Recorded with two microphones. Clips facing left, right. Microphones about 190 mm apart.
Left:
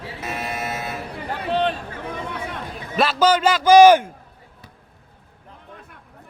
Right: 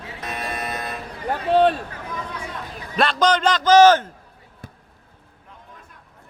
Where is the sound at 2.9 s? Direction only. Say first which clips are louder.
Left 1 dB; 5° left (ahead or behind).